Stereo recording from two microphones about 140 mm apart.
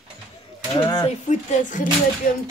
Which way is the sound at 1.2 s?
65° left (ahead or behind).